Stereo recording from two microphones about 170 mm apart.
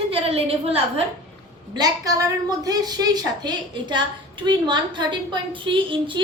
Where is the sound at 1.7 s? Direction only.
20° right (ahead or behind).